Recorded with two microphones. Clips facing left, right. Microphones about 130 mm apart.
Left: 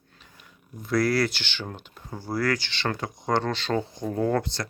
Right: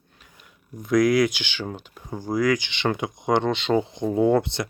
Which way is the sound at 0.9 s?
15° right (ahead or behind).